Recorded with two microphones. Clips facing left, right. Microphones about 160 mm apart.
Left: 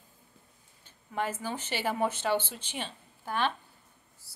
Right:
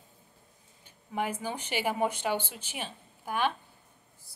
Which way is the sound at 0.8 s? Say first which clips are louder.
Even; 15° right (ahead or behind).